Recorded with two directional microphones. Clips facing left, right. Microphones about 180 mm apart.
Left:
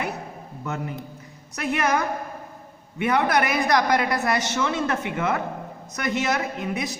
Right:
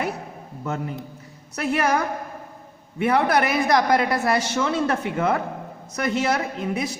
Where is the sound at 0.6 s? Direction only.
30° right (ahead or behind).